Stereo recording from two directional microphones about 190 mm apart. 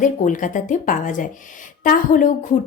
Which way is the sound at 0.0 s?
45° left (ahead or behind).